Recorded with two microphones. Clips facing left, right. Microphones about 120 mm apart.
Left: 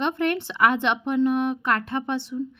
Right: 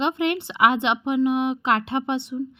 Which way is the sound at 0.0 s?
15° right (ahead or behind).